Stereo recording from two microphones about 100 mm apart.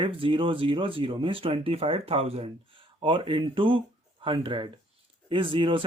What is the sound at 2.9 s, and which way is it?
Speech, 60° right (ahead or behind).